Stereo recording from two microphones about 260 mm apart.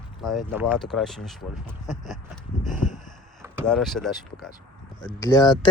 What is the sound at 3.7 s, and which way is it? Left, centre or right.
Speech, centre.